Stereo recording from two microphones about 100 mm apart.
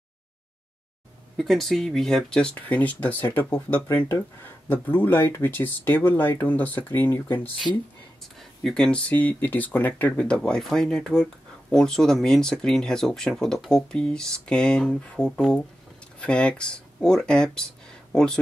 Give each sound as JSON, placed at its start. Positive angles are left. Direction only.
{"t": 1.3, "sound": "speech", "side_deg": 0}
{"t": 8.4, "sound": "speech", "side_deg": 5}